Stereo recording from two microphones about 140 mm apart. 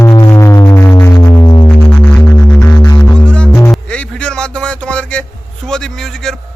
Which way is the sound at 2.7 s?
25° left (ahead or behind).